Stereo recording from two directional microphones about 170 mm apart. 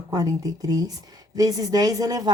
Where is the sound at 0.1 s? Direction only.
20° right (ahead or behind).